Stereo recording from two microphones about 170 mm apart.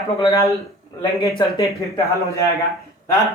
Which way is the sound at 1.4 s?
25° left (ahead or behind).